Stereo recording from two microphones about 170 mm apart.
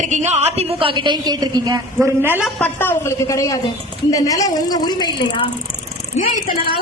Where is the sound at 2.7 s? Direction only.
15° left (ahead or behind).